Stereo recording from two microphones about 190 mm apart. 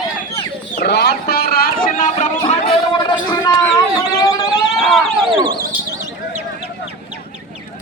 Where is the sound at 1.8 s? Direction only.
40° left (ahead or behind).